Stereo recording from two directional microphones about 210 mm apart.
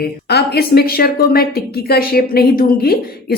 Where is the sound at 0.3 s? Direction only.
50° left (ahead or behind).